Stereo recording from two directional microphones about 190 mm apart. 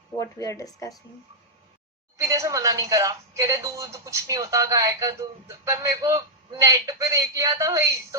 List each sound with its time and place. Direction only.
0.2 s speech: 15° left (ahead or behind)
2.1 s a woman's voice: 15° right (ahead or behind)